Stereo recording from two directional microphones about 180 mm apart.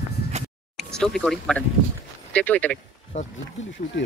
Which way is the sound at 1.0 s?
5° left (ahead or behind).